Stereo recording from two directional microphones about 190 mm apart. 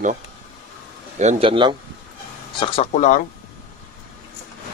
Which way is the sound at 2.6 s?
35° left (ahead or behind).